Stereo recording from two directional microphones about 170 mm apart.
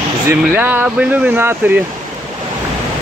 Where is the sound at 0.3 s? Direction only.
10° right (ahead or behind).